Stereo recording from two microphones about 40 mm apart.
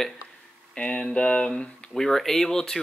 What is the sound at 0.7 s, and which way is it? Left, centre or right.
Speech, left.